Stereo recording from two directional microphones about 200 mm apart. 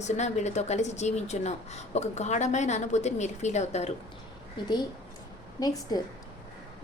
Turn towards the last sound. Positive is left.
turn(degrees=20)  # may be behind; listen again after turning